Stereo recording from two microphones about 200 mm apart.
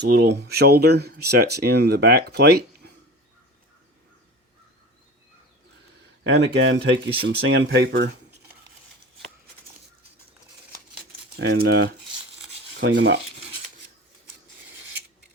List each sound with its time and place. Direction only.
0.0 s speech: 60° right (ahead or behind)
6.2 s speech: 60° right (ahead or behind)
10.9 s keys jangling: 55° right (ahead or behind)
12.8 s speech: 65° right (ahead or behind)